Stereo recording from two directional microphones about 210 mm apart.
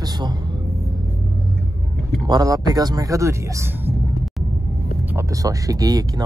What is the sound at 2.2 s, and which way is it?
Speech, 20° right (ahead or behind).